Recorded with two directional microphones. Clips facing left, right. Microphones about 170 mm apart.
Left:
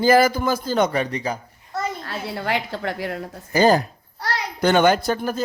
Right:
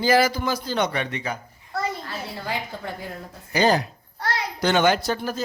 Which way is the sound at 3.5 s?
45° left (ahead or behind).